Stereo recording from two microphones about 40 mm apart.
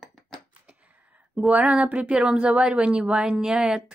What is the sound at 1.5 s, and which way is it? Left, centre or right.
Speech, right.